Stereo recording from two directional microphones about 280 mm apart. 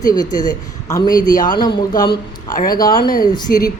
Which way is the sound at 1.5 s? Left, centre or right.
Centre.